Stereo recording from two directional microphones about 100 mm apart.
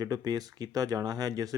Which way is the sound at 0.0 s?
40° right (ahead or behind).